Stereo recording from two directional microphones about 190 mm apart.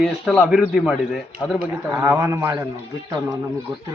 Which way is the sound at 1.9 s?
15° right (ahead or behind).